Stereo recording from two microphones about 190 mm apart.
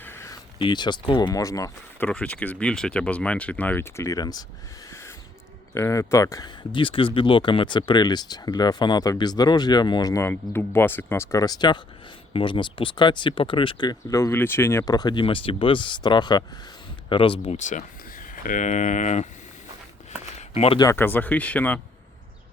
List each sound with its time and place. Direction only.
0.0 s a sound: 15° left (ahead or behind)
0.6 s speech: 25° left (ahead or behind)
2.0 s speech: 5° left (ahead or behind)
4.9 s owl: 15° left (ahead or behind)
5.7 s speech: 15° left (ahead or behind)
6.7 s speech: 25° left (ahead or behind)
20.5 s speech: 35° left (ahead or behind)
20.7 s speech: 15° left (ahead or behind)